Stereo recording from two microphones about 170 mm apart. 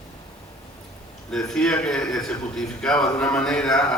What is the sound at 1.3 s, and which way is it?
A man's voice, 5° left (ahead or behind).